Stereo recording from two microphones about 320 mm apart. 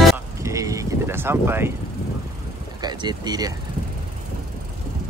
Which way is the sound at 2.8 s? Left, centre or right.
Centre.